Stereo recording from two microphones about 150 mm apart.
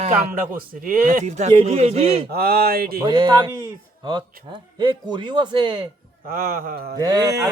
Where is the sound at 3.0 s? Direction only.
30° right (ahead or behind).